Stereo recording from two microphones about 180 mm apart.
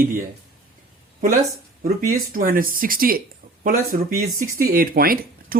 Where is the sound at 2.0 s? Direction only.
55° right (ahead or behind).